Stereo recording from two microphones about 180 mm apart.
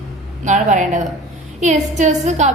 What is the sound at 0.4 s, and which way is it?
A woman's voice, 45° right (ahead or behind).